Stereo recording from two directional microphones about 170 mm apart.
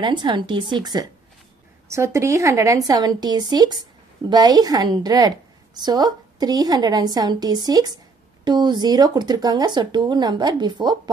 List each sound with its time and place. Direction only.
0.0 s speech: 25° right (ahead or behind)